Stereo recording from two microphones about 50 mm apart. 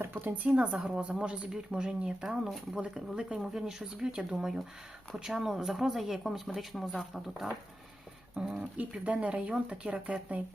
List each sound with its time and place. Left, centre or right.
0.0 s speech: right
0.5 s speech: right
1.7 s speech: centre
8.5 s speech: right